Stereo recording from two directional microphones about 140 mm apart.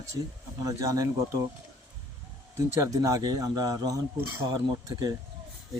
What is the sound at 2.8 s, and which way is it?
A man's voice, 25° right (ahead or behind).